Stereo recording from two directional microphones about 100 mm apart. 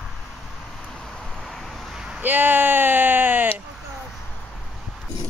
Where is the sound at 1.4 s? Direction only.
Centre (ahead or behind).